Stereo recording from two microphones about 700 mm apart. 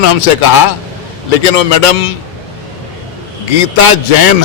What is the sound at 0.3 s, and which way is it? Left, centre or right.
A man's voice, left.